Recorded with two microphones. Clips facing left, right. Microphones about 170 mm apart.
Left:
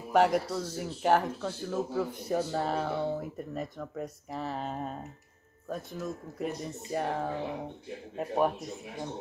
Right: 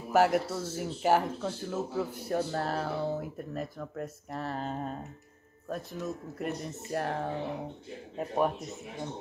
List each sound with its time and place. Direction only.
0.1 s speech: 5° right (ahead or behind)